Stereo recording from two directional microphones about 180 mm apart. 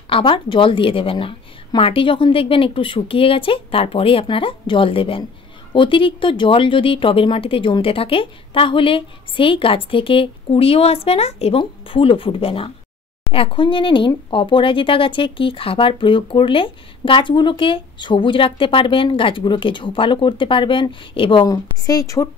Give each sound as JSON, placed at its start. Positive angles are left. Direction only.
{"t": 0.1, "sound": "speech", "side_deg": 25}